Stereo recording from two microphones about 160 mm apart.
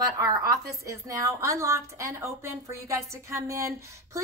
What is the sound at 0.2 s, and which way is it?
A woman's voice, 20° right (ahead or behind).